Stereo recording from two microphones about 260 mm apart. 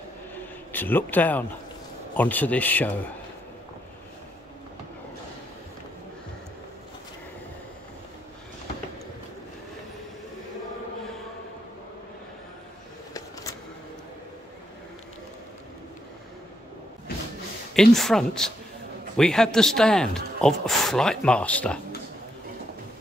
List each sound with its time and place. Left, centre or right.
0.7 s speech: centre
17.7 s speech: centre